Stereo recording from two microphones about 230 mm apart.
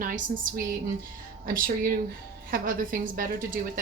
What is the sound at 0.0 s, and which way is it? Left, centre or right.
Speech, right.